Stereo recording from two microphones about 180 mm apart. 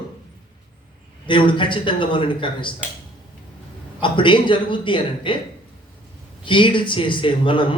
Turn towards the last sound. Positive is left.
turn(degrees=30)  # may be behind; listen again after turning